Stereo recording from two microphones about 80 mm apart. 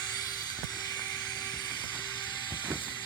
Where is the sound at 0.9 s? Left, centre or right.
Left.